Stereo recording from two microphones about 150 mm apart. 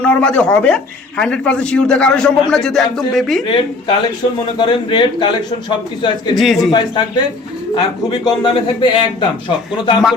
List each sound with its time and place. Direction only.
0.0 s speech: 5° left (ahead or behind)
3.4 s a man's voice: 35° left (ahead or behind)
6.3 s speech: centre (ahead or behind)
6.7 s a man's voice: 30° left (ahead or behind)
8.1 s a man's voice: 30° left (ahead or behind)